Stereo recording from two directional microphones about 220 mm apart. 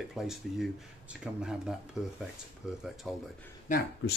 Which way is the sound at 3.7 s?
35° left (ahead or behind).